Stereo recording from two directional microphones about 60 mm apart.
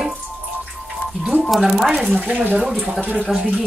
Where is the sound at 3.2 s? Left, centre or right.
Centre.